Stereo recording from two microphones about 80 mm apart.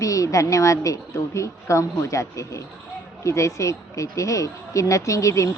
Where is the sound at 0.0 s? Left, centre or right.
Left.